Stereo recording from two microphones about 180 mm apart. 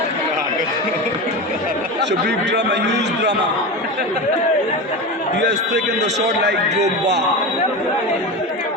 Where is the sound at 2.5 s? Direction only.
70° right (ahead or behind).